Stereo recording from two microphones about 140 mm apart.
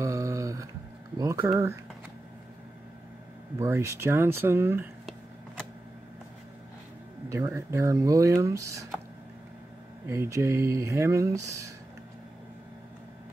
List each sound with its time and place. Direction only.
0.0 s a sound: 20° right (ahead or behind)
3.5 s speech: 20° right (ahead or behind)
7.2 s speech: 20° right (ahead or behind)
10.0 s speech: 20° right (ahead or behind)